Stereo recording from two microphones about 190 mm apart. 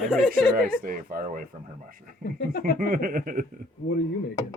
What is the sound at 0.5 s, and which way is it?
Speech, 50° right (ahead or behind).